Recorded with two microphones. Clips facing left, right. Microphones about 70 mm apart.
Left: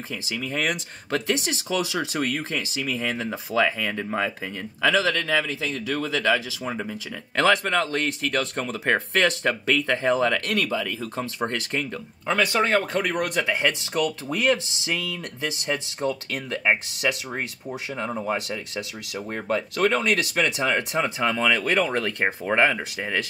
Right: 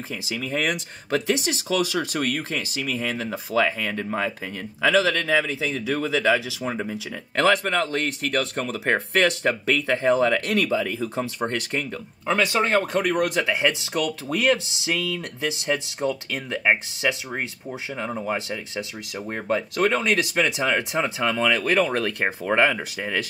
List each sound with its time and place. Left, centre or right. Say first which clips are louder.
0.1 s speech: right 2 dB; centre
10.4 s speech: right 3 dB; right
11.0 s speech: right 2 dB; centre